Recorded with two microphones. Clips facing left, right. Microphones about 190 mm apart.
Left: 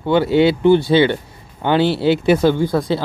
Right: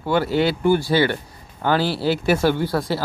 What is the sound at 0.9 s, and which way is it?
Speech, 20° left (ahead or behind).